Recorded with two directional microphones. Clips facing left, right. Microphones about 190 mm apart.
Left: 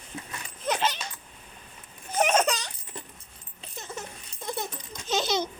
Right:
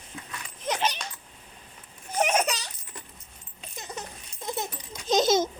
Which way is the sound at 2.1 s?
10° right (ahead or behind).